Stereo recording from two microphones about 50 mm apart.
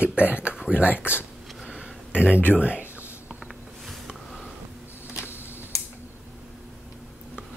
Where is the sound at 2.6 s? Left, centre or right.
Right.